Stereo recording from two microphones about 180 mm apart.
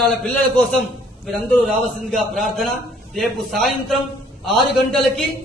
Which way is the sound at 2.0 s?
Centre (ahead or behind).